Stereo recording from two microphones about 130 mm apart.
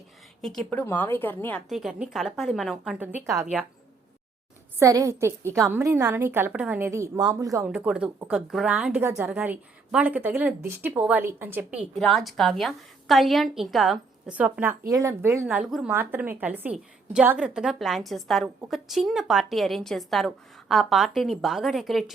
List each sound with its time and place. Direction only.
0.7 s speech: 15° left (ahead or behind)
1.7 s a woman's voice: 5° right (ahead or behind)
4.8 s a woman's voice: 25° right (ahead or behind)
7.6 s a woman's voice: 5° right (ahead or behind)
9.0 s a woman's voice: 20° right (ahead or behind)
11.9 s a woman's voice: centre (ahead or behind)
14.8 s a woman's voice: 25° right (ahead or behind)
15.4 s a woman's voice: 5° right (ahead or behind)